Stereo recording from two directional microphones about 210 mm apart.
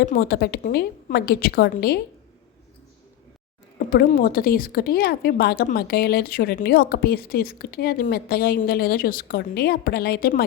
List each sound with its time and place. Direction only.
0.1 s speech: 45° left (ahead or behind)
3.8 s speech: 40° left (ahead or behind)